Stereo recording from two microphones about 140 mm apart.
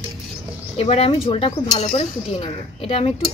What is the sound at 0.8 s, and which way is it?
Cutlery, 45° left (ahead or behind).